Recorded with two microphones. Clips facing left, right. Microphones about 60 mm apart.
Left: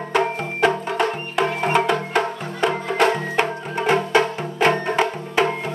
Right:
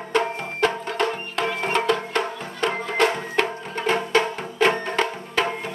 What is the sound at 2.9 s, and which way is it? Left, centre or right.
Music, centre.